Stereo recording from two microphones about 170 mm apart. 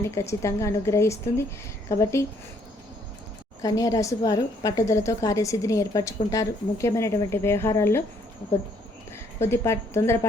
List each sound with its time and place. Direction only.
0.0 s a woman's voice: 15° left (ahead or behind)
3.6 s a woman's voice: 20° left (ahead or behind)
9.4 s a woman's voice: 15° left (ahead or behind)